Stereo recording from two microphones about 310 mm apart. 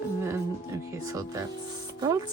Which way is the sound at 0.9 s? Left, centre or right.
Centre.